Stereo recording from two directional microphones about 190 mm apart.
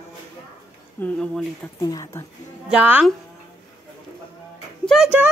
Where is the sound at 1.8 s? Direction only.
15° left (ahead or behind).